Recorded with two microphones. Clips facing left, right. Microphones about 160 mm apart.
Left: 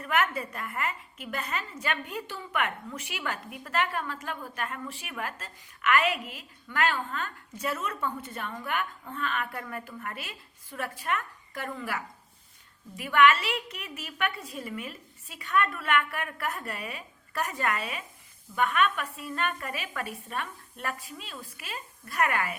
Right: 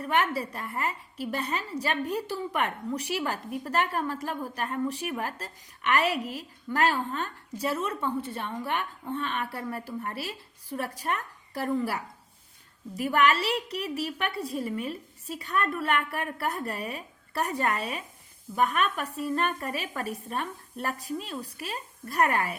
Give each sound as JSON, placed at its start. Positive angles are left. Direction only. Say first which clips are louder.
{"t": 0.0, "sound": "a woman's voice", "louder": "right 2 dB", "side_deg": -30}